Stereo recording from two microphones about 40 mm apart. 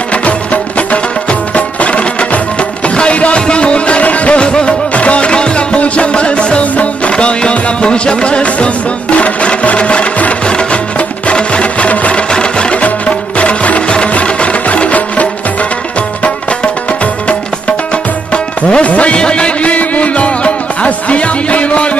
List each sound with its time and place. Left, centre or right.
1.8 s music: left
13.4 s music: left
18.3 s music: left